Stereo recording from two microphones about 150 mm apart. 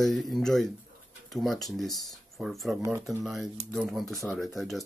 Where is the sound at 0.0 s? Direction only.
Centre (ahead or behind).